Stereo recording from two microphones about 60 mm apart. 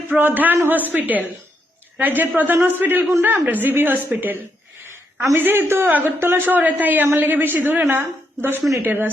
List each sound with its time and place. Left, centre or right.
0.1 s a man's voice: right